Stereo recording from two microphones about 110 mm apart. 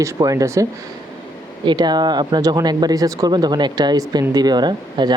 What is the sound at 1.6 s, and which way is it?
Speech, 40° right (ahead or behind).